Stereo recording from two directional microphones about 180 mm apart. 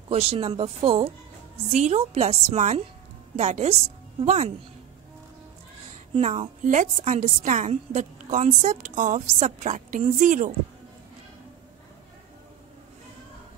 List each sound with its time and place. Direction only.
0.1 s a woman's voice: 35° right (ahead or behind)
6.1 s a woman's voice: 35° right (ahead or behind)